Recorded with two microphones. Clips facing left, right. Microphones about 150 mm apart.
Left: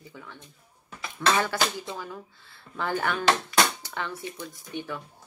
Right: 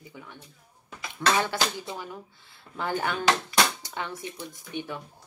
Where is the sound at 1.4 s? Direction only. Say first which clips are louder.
Left 1 dB; 15° right (ahead or behind).